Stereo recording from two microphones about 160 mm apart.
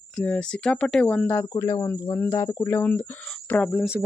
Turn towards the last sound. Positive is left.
turn(degrees=-5)  # may be behind; listen again after turning